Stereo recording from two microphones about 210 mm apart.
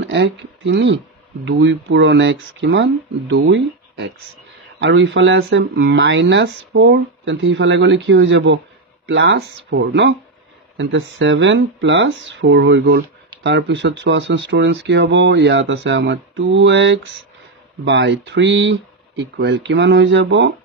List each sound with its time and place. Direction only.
0.0 s speech: 60° right (ahead or behind)